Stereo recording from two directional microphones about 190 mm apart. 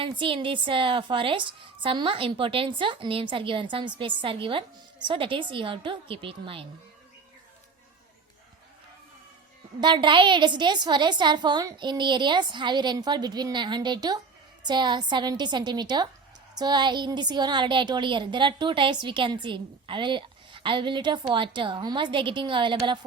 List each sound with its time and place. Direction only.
0.0 s a woman's voice: 25° right (ahead or behind)
9.8 s a woman's voice: 25° right (ahead or behind)